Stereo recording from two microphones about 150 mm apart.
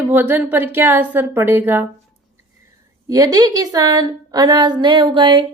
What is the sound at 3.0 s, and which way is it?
A woman's voice, 25° right (ahead or behind).